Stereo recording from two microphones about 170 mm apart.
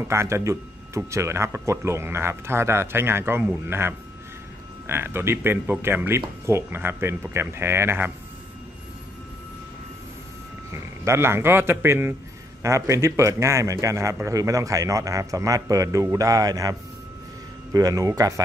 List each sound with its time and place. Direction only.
0.1 s speech: 15° right (ahead or behind)
10.7 s a man's voice: 15° right (ahead or behind)
17.7 s a man's voice: 20° right (ahead or behind)